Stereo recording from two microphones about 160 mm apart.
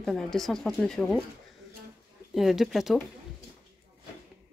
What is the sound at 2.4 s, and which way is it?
Speech, centre (ahead or behind).